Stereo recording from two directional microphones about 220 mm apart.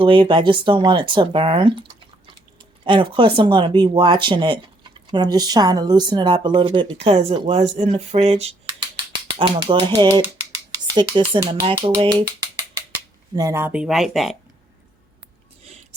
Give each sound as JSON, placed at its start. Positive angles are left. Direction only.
{"t": 0.0, "sound": "speech", "side_deg": -20}
{"t": 2.8, "sound": "speech", "side_deg": -20}
{"t": 13.3, "sound": "speech", "side_deg": -15}